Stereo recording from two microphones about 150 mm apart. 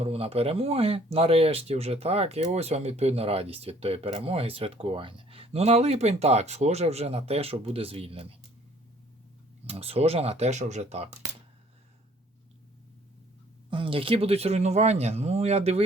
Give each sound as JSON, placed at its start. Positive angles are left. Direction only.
{"t": 0.0, "sound": "speech", "side_deg": -40}
{"t": 9.6, "sound": "speech", "side_deg": -40}
{"t": 13.7, "sound": "speech", "side_deg": -35}